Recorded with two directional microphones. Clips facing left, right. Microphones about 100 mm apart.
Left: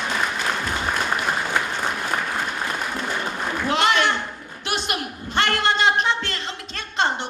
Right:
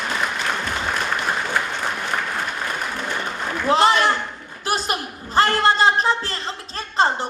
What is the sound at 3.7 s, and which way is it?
A man's voice, 35° right (ahead or behind).